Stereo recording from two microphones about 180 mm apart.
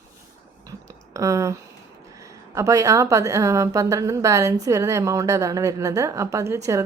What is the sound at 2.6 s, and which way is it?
A woman's voice, 15° right (ahead or behind).